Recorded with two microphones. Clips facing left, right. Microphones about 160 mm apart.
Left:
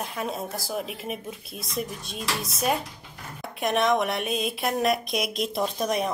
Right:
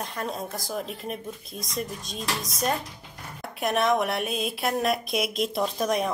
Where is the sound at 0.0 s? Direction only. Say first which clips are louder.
Left 1 dB; 5° left (ahead or behind).